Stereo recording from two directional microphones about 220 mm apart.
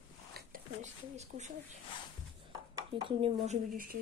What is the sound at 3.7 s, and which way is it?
Speech, 40° right (ahead or behind).